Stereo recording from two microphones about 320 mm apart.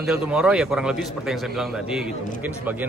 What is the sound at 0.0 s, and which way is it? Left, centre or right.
A man's voice, centre.